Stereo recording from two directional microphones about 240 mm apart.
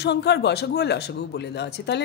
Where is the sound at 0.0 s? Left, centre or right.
Left.